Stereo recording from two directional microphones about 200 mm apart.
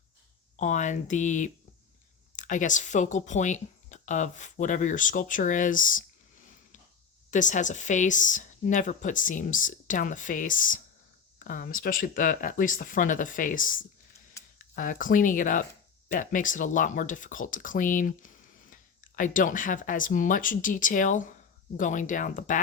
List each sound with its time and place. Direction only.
0.5 s speech: 35° left (ahead or behind)
14.4 s a sound: 15° left (ahead or behind)
14.8 s speech: 40° left (ahead or behind)